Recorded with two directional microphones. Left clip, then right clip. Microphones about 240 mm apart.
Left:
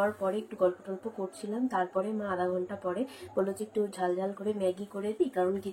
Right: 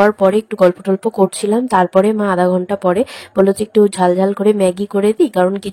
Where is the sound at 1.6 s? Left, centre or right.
Right.